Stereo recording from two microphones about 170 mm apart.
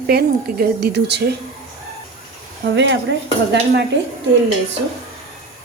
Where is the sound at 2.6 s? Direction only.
90° right.